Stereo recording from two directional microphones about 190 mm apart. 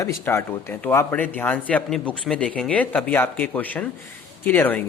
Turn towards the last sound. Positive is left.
turn(degrees=10)  # may be behind; listen again after turning